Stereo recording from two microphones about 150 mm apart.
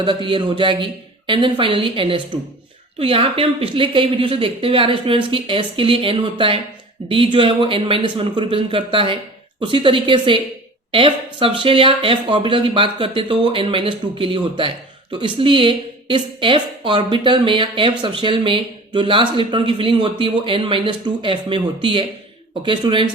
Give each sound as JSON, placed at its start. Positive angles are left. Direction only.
{"t": 0.0, "sound": "speech", "side_deg": -35}